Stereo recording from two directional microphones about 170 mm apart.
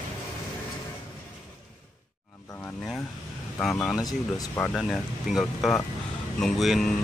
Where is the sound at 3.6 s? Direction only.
5° left (ahead or behind).